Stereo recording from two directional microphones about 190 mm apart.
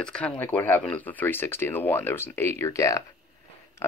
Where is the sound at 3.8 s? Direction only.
15° left (ahead or behind).